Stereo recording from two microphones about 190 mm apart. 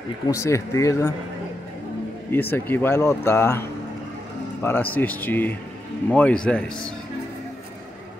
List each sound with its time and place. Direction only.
0.3 s speech: 15° left (ahead or behind)
2.5 s speech: 10° left (ahead or behind)